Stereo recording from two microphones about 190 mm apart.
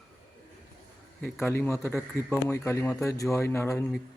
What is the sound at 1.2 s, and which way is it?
A man's voice, 10° left (ahead or behind).